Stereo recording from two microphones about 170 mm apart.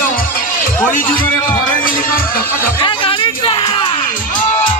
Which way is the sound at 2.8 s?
30° left (ahead or behind).